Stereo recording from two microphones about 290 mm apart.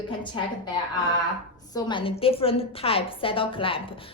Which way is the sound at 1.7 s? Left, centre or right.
Centre.